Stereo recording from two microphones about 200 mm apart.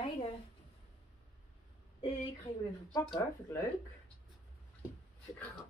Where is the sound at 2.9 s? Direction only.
20° left (ahead or behind).